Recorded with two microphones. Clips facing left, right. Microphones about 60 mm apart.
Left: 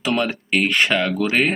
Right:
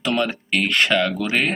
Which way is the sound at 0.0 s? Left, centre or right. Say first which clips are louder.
Even; centre.